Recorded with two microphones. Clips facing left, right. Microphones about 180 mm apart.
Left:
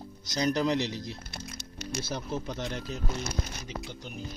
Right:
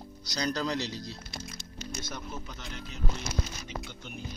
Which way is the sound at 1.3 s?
60° left (ahead or behind).